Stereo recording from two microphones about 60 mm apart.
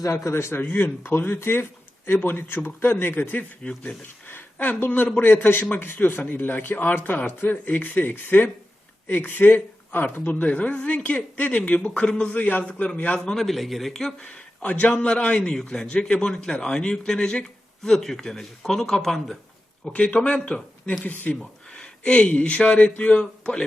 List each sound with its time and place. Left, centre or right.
0.0 s a man's voice: left
0.6 s speech: left
3.6 s a man's voice: centre
4.3 s speech: left
13.1 s speech: centre
14.3 s a man's voice: left; by 19.4 s centre
19.9 s speech: left